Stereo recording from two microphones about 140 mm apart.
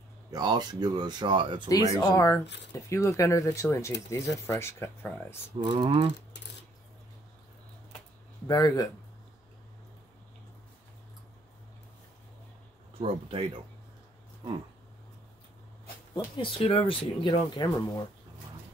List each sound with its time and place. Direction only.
0.3 s speech: 30° right (ahead or behind)
2.0 s speech: 20° left (ahead or behind)
5.6 s speech: 35° right (ahead or behind)
8.5 s speech: 30° left (ahead or behind)
13.0 s speech: 40° right (ahead or behind)
16.3 s speech: 40° left (ahead or behind)